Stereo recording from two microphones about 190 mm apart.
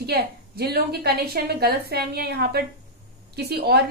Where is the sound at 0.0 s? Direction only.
55° right (ahead or behind).